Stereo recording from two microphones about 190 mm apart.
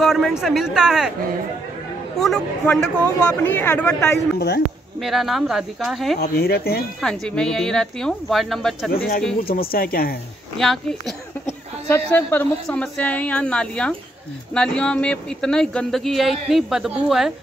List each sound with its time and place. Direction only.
0.0 s speech: centre (ahead or behind)
2.1 s a woman's voice: centre (ahead or behind)
6.1 s speech: 55° left (ahead or behind)
7.0 s speech: 5° left (ahead or behind)
8.9 s speech: 50° left (ahead or behind)
10.6 s a woman's voice: centre (ahead or behind)